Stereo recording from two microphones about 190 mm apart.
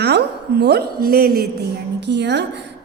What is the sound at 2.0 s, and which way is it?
Speech, 65° right (ahead or behind).